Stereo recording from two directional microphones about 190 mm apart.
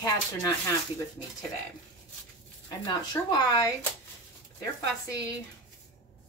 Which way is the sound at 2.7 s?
20° left (ahead or behind).